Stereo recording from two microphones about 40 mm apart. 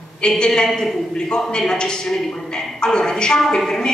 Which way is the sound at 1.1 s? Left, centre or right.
Left.